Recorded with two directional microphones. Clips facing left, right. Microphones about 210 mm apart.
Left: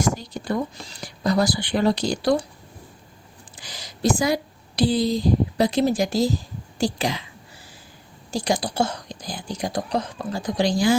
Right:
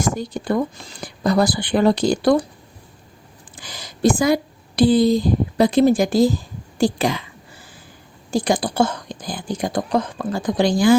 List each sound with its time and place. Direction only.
0.1 s speech: 50° right (ahead or behind)
3.5 s a sound: 55° right (ahead or behind)
4.8 s speech: 55° right (ahead or behind)
8.3 s speech: 55° right (ahead or behind)